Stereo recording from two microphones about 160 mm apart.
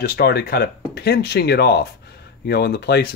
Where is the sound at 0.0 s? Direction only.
85° left.